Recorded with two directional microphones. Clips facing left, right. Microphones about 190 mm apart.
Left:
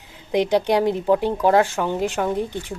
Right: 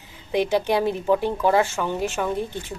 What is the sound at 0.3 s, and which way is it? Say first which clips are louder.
Speech: left 2 dB; 15° left (ahead or behind).